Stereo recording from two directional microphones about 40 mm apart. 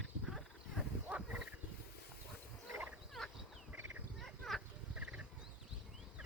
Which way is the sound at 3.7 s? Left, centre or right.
Right.